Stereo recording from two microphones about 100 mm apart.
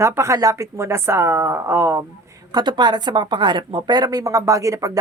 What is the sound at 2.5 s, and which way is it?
Speech, 45° right (ahead or behind).